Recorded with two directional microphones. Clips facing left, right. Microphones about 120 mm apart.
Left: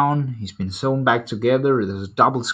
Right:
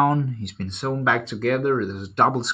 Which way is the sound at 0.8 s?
20° left (ahead or behind).